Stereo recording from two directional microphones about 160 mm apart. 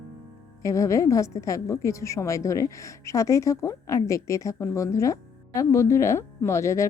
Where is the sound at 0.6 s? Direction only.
20° left (ahead or behind).